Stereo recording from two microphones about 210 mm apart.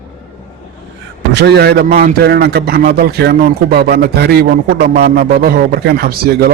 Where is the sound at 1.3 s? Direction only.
55° right (ahead or behind).